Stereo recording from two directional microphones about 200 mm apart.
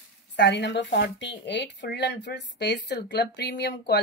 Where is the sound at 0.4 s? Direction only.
60° left (ahead or behind).